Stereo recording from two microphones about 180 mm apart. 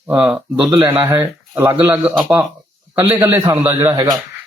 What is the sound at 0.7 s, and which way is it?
A man's voice, 25° right (ahead or behind).